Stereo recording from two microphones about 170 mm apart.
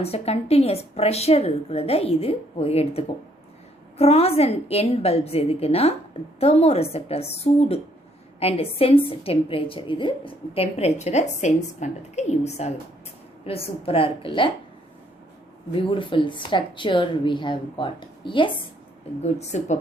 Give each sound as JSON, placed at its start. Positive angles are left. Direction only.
{"t": 0.0, "sound": "a woman's voice", "side_deg": 35}
{"t": 15.7, "sound": "a woman's voice", "side_deg": 30}
{"t": 19.2, "sound": "a woman's voice", "side_deg": 40}